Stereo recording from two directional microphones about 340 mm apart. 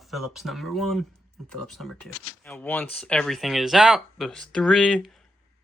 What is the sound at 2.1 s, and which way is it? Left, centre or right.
Speech, right.